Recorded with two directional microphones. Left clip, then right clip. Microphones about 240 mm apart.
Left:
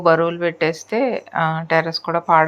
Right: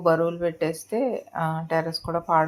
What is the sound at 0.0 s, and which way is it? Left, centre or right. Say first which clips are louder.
Speech: left 6 dB; centre.